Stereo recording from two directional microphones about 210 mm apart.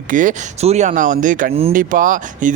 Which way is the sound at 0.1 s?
40° right (ahead or behind).